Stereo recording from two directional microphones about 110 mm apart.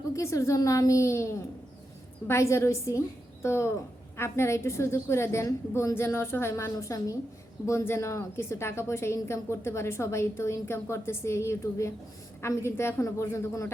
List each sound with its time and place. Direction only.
0.2 s a woman's voice: 30° left (ahead or behind)